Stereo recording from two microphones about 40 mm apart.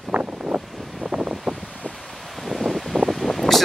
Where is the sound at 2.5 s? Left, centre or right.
Centre.